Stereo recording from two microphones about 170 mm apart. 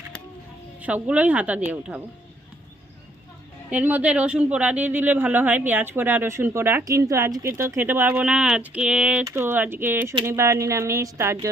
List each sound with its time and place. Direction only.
0.8 s speech: 10° right (ahead or behind)
3.7 s speech: 10° right (ahead or behind)